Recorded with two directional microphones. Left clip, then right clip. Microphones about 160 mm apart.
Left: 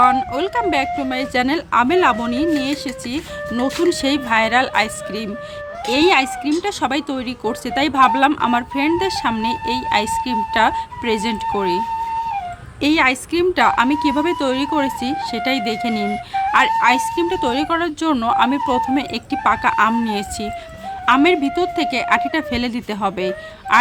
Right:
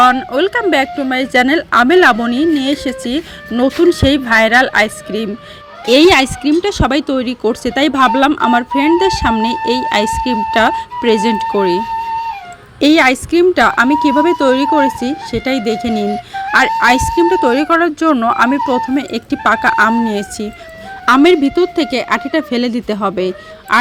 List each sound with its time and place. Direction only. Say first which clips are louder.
0.3 s speech: right 6 dB; 25° right (ahead or behind)
5.8 s speech: right 7 dB; 40° right (ahead or behind)
12.8 s speech: right 6 dB; 30° right (ahead or behind)